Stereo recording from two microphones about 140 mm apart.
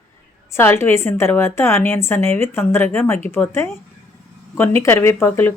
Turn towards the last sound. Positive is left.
turn(degrees=15)  # may be behind; listen again after turning